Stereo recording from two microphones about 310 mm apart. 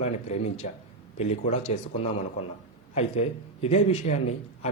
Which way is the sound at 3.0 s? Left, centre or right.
Left.